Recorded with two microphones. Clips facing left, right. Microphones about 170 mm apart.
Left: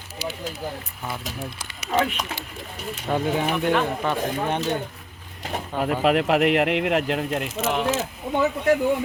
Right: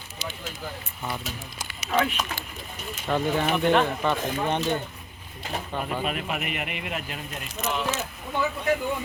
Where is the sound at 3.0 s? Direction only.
10° left (ahead or behind).